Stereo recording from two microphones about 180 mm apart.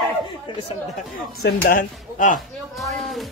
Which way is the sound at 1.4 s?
55° left (ahead or behind).